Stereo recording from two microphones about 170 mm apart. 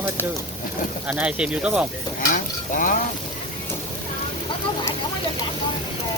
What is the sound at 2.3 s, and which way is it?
Stir, 50° left (ahead or behind).